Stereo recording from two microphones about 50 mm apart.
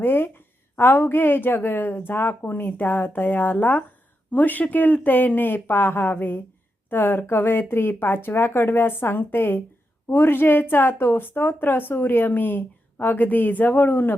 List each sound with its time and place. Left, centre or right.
0.0 s a woman's voice: left